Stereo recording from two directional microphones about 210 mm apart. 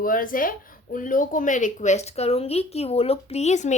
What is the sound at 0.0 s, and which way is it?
A woman's voice, 40° left (ahead or behind).